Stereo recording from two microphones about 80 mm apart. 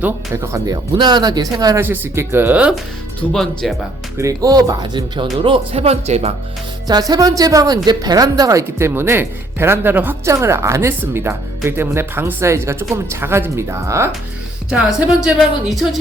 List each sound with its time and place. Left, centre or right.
0.3 s speech: right
0.7 s speech: right
1.8 s speech: right
3.3 s speech: centre
4.2 s speech: right
6.8 s music: right
8.8 s speech: right
10.2 s speech: right
14.7 s speech: centre
15.4 s speech: centre